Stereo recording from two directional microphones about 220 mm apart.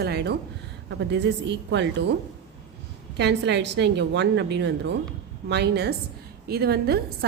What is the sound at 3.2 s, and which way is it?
A woman's voice, 50° right (ahead or behind).